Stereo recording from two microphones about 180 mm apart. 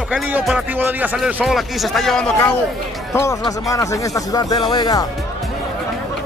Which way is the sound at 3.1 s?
15° left (ahead or behind).